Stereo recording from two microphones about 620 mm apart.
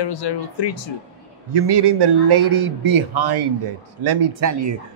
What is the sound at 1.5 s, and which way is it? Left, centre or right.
A man's voice, right.